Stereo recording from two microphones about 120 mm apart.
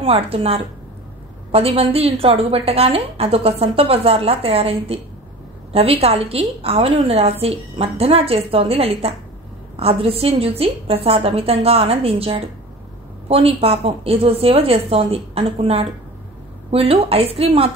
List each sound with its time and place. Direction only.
0.0 s a woman's voice: 55° right (ahead or behind)